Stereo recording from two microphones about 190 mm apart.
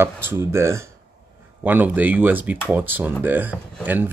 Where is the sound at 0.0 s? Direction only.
10° right (ahead or behind).